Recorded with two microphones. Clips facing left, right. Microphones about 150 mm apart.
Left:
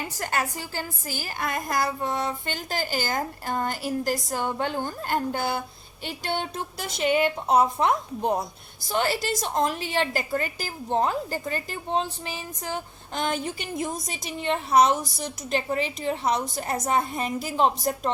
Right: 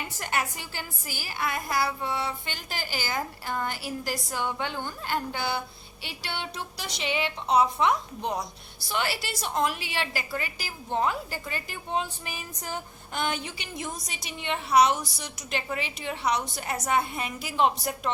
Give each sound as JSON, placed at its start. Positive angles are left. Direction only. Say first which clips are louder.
{"t": 0.2, "sound": "a woman's voice", "louder": "left 2 dB", "side_deg": 40}
{"t": 13.3, "sound": "a woman's voice", "louder": "left 6 dB", "side_deg": 45}